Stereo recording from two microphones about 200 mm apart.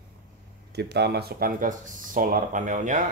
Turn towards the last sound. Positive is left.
turn(degrees=-40)  # may be behind; listen again after turning